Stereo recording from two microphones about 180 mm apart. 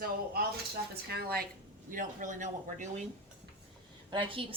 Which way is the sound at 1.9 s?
45° right (ahead or behind).